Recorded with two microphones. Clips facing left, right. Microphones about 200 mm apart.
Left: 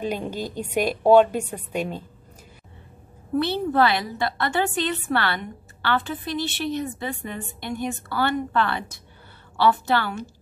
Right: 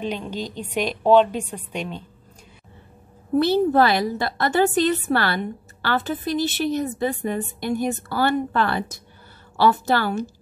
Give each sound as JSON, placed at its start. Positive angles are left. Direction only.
{"t": 0.0, "sound": "a woman's voice", "side_deg": 10}
{"t": 3.3, "sound": "a woman's voice", "side_deg": -40}